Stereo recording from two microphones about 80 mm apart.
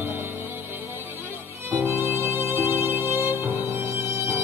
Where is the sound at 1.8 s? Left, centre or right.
Right.